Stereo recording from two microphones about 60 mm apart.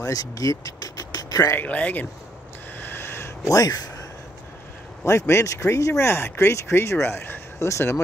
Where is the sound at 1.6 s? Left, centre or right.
Left.